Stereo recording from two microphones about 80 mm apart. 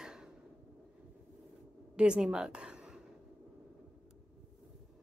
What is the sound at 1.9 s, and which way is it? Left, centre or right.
A woman's voice, centre.